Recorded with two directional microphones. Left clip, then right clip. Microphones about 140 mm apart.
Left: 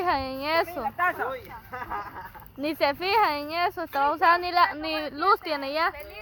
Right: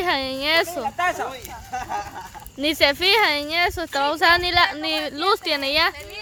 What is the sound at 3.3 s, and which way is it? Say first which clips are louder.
Speech: right 6 dB; 5° right (ahead or behind).